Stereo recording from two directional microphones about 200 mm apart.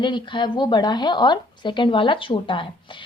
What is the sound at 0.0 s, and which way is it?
A woman's voice, 25° left (ahead or behind).